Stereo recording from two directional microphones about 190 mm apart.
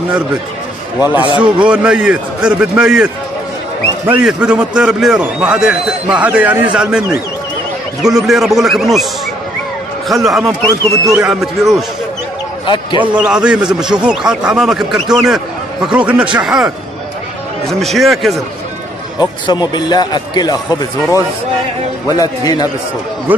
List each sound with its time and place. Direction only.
1.0 s a man's voice: 10° right (ahead or behind)
4.1 s a man's voice: 5° right (ahead or behind)
8.0 s a man's voice: centre (ahead or behind)
10.0 s a man's voice: centre (ahead or behind)
12.6 s a man's voice: 25° left (ahead or behind)
13.0 s a man's voice: 5° right (ahead or behind)
19.1 s a man's voice: 20° left (ahead or behind)
22.0 s a man's voice: 20° left (ahead or behind)